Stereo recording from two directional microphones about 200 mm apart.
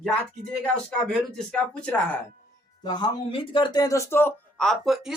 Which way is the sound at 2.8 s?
20° left (ahead or behind).